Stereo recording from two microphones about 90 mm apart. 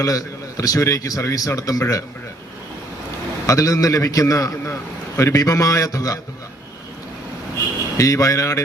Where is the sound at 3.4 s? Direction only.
40° left (ahead or behind).